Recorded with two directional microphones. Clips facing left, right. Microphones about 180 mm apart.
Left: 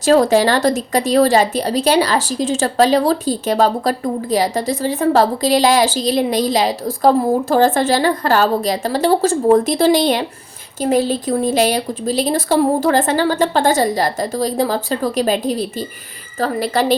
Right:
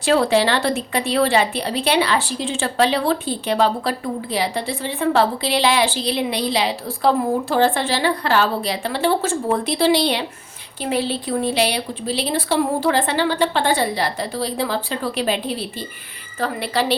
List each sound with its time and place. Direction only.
0.0 s a woman's voice: 40° left (ahead or behind)